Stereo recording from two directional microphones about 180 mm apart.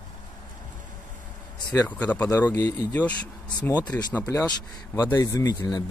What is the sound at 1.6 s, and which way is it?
Speech, 10° left (ahead or behind).